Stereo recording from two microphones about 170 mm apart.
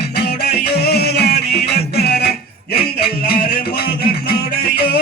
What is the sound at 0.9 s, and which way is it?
Music, 75° left (ahead or behind).